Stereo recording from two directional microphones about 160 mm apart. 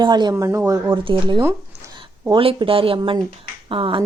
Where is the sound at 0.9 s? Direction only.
30° right (ahead or behind).